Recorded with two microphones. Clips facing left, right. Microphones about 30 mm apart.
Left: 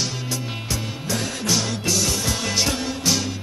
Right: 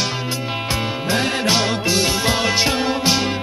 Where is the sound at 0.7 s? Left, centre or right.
Right.